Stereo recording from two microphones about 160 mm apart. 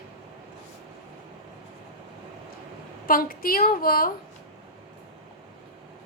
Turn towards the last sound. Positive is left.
turn(degrees=65)  # may be behind; listen again after turning